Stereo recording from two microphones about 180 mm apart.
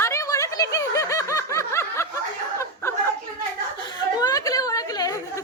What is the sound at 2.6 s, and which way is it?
Chuckle, 15° left (ahead or behind).